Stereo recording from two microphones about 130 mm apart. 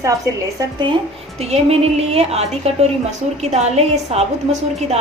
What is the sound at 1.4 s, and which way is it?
A woman's voice, 55° right (ahead or behind).